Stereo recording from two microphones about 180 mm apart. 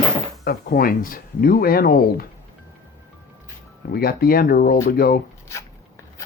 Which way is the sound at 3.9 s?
55° left (ahead or behind).